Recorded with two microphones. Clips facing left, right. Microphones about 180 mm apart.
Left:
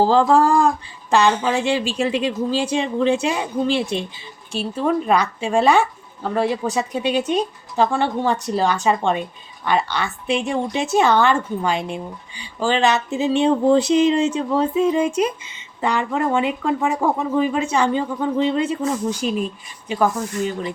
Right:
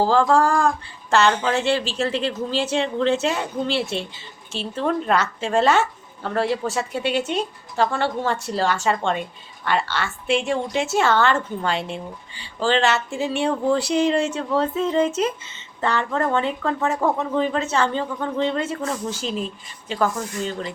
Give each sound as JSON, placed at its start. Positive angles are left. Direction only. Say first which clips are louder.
{"t": 0.0, "sound": "a woman's voice", "louder": "left 3 dB", "side_deg": 15}